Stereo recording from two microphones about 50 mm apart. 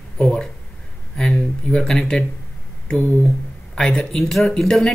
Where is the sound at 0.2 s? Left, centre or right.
Left.